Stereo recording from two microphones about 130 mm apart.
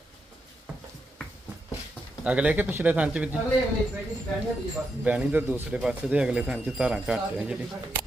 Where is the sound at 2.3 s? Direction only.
10° right (ahead or behind).